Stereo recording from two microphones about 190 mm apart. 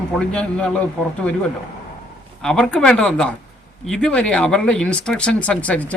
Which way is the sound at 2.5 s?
5° left (ahead or behind).